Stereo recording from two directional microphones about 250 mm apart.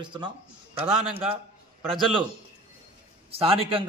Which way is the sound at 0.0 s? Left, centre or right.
Centre.